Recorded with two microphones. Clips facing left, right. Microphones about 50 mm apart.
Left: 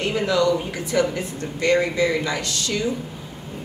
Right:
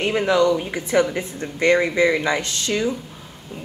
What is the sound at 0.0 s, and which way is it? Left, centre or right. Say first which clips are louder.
Speech: right 2 dB; right.